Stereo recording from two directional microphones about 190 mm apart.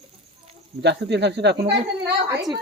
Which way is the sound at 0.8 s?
65° right (ahead or behind).